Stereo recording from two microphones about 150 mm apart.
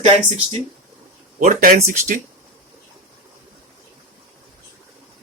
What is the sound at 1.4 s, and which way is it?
Speech, 65° right (ahead or behind).